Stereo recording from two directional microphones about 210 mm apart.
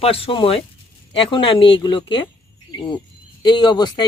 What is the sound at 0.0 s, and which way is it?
Speech, 25° left (ahead or behind).